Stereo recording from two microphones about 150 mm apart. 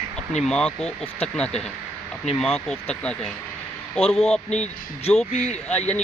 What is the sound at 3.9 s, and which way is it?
Speech, 40° left (ahead or behind).